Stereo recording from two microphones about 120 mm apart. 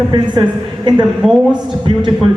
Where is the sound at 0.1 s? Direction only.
40° right (ahead or behind).